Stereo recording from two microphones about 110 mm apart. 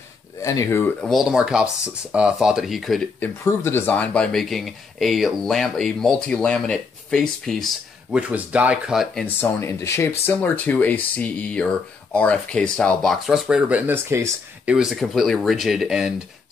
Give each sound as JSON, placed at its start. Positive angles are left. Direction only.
{"t": 0.4, "sound": "speech", "side_deg": 30}
{"t": 1.0, "sound": "speech", "side_deg": 0}
{"t": 3.4, "sound": "speech", "side_deg": 20}
{"t": 8.1, "sound": "speech", "side_deg": -10}
{"t": 8.9, "sound": "speech", "side_deg": 0}
{"t": 9.2, "sound": "speech", "side_deg": 20}
{"t": 14.7, "sound": "speech", "side_deg": -5}